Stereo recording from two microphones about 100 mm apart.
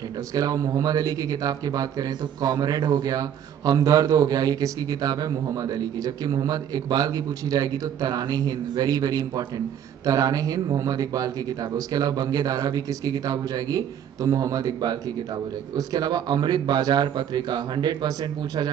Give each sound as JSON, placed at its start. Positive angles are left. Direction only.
{"t": 0.3, "sound": "a man's voice", "side_deg": -40}